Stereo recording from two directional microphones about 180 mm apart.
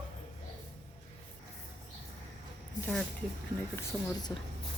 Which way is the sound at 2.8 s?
Centre (ahead or behind).